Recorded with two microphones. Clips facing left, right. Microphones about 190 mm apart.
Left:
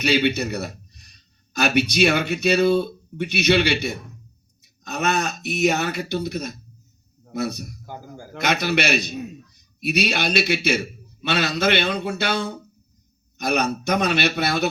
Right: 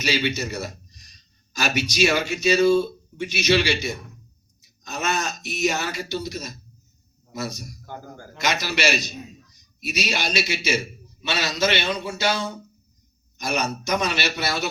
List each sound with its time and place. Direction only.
0.0 s a man's voice: 60° left (ahead or behind)